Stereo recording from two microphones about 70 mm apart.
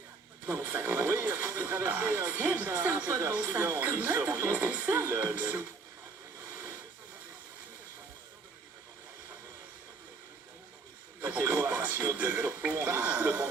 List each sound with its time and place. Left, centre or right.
0.4 s speech: right
0.9 s a sound: right
1.4 s speech: right
3.8 s music: right
6.5 s hiss: right
11.2 s speech: right